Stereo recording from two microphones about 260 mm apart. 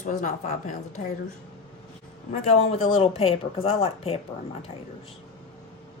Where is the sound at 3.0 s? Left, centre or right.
Left.